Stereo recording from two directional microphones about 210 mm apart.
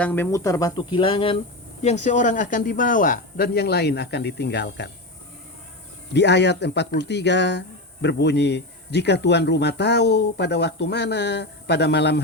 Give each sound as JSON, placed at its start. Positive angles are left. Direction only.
{"t": 0.0, "sound": "speech", "side_deg": 10}
{"t": 6.1, "sound": "speech", "side_deg": 55}